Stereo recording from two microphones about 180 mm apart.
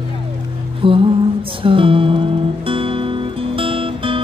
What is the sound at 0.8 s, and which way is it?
Music, 30° right (ahead or behind).